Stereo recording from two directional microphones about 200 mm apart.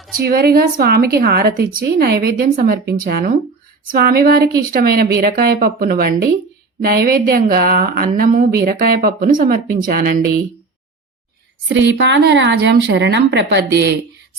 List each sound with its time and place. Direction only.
0.2 s a woman's voice: 50° right (ahead or behind)
11.7 s a woman's voice: 60° right (ahead or behind)